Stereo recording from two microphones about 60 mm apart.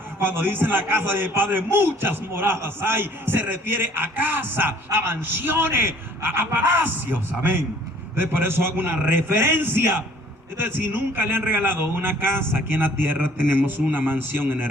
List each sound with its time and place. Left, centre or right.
0.2 s a man's voice: right